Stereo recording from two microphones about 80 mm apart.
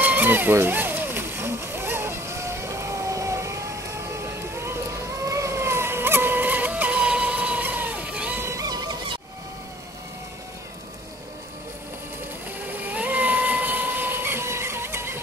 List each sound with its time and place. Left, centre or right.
0.0 s a sound: right
5.2 s vehicle: right; by 8.4 s centre
8.4 s music: right
8.6 s music: right
12.5 s vehicle: right